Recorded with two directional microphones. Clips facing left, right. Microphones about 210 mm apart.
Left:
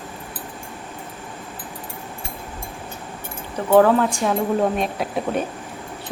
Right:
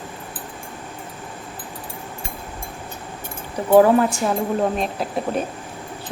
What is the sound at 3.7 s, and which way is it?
Speech, 10° right (ahead or behind).